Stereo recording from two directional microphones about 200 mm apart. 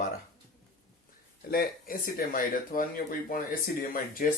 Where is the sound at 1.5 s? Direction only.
50° left (ahead or behind).